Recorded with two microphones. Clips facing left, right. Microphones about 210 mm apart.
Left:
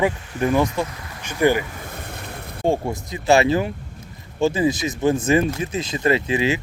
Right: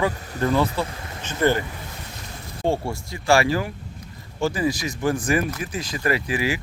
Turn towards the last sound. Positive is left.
turn(degrees=25)  # may be behind; listen again after turning